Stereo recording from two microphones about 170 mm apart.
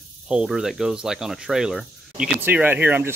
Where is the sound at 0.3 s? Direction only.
5° right (ahead or behind).